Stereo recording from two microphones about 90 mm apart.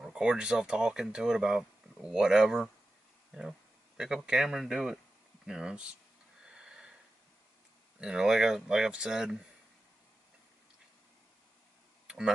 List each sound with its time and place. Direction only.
0.0 s speech: 10° right (ahead or behind)
6.4 s a sound: 10° right (ahead or behind)
8.0 s speech: 10° right (ahead or behind)
12.1 s tick-tock: 5° right (ahead or behind)